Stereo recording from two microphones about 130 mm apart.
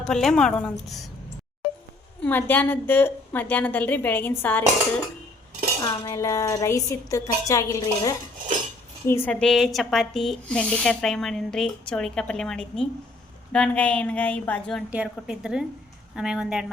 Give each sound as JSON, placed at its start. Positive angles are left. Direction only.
{"t": 0.0, "sound": "speech", "side_deg": 5}
{"t": 2.2, "sound": "a woman's voice", "side_deg": 15}
{"t": 5.8, "sound": "a woman's voice", "side_deg": 25}
{"t": 14.8, "sound": "a woman's voice", "side_deg": -10}